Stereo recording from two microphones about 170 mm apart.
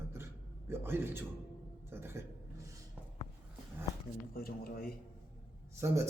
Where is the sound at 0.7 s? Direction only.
15° right (ahead or behind).